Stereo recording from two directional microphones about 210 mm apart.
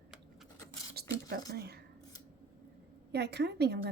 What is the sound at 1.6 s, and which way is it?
Speech, 50° right (ahead or behind).